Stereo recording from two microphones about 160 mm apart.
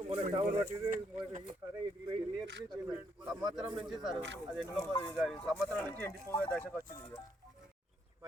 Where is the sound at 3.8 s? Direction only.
5° right (ahead or behind).